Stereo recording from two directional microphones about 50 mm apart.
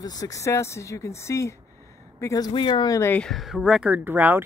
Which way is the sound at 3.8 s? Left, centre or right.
Right.